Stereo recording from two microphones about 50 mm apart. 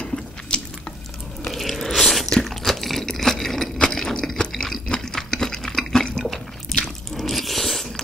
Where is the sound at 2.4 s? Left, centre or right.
Centre.